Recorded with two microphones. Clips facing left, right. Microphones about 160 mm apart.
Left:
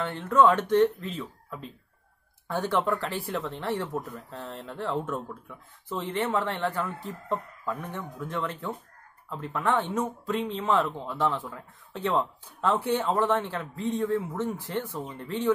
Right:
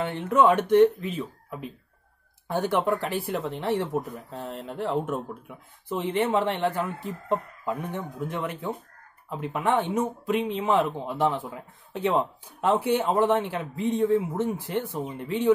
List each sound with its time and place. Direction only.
0.0 s speech: 15° right (ahead or behind)